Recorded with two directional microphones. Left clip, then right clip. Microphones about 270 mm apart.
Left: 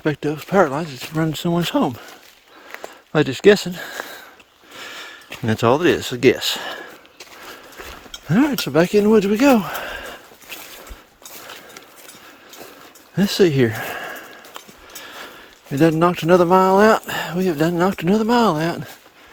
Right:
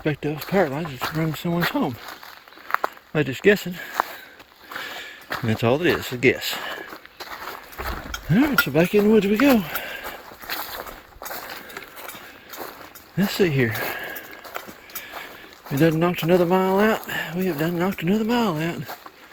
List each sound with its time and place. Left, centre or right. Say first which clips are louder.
0.0 s speech: left 4 dB; centre
3.1 s speech: left 6 dB; left
4.7 s a sound: right 1 dB; centre
5.5 s speech: left 5 dB; centre
8.3 s speech: left 1 dB; centre
13.1 s speech: left 5 dB; left
15.7 s speech: left 4 dB; centre